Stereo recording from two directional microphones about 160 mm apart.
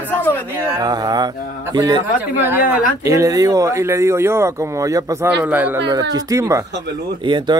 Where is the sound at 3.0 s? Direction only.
20° right (ahead or behind).